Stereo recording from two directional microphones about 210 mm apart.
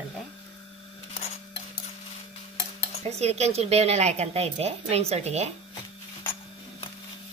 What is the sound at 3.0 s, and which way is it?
Speech, 30° right (ahead or behind).